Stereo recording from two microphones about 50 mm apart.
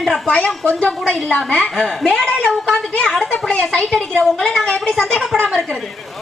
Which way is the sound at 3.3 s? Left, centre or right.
Left.